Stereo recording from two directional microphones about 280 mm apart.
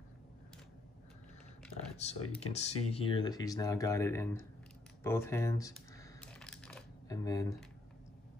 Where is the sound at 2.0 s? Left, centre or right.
Left.